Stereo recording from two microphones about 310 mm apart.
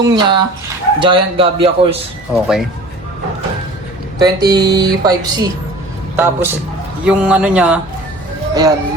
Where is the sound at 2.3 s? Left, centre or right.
Centre.